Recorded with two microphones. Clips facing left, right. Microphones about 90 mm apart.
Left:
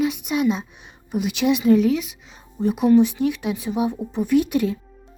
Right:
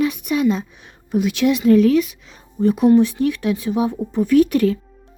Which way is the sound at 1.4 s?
45° left (ahead or behind).